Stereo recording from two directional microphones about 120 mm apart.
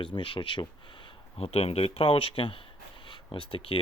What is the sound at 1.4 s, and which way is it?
Speech, 55° left (ahead or behind).